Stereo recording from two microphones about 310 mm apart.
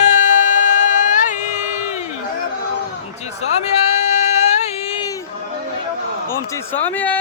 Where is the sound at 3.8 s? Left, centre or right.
Left.